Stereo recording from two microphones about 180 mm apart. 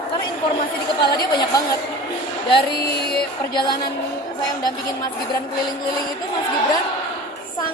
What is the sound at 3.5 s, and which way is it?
Speech, 25° left (ahead or behind).